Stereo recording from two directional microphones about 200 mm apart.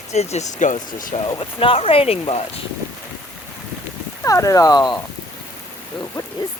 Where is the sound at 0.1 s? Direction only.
35° left (ahead or behind).